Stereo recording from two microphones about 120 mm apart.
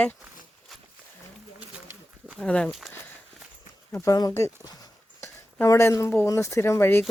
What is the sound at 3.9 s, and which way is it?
Speech, 25° left (ahead or behind).